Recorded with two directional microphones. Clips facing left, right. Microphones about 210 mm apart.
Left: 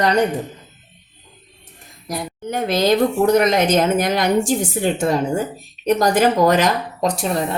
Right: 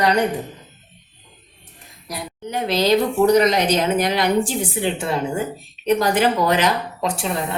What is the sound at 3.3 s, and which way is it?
Speech, 50° left (ahead or behind).